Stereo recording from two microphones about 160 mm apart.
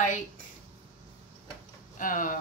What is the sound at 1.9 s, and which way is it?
Speech, 55° left (ahead or behind).